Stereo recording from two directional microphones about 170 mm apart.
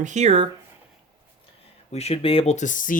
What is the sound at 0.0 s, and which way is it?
Speech, 45° right (ahead or behind).